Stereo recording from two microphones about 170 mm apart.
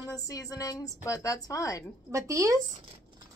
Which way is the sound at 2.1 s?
20° right (ahead or behind).